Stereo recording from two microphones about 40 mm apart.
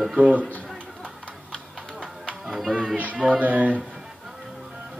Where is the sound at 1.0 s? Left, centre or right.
Left.